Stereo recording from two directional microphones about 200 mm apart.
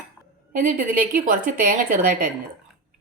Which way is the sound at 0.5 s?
40° right (ahead or behind).